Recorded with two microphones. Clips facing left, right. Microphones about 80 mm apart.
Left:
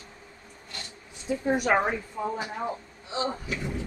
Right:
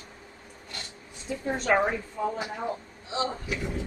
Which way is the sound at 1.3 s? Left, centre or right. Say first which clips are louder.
Left 2 dB; centre.